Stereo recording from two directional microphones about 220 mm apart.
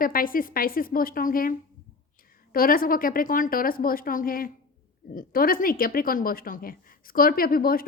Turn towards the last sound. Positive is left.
turn(degrees=40)  # may be behind; listen again after turning